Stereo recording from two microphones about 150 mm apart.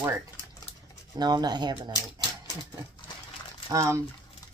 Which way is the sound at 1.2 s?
30° right (ahead or behind).